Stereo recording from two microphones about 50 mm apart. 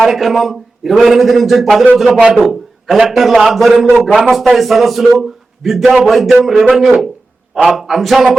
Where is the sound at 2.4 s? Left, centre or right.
Centre.